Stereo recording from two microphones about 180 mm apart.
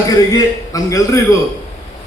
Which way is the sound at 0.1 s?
20° left (ahead or behind).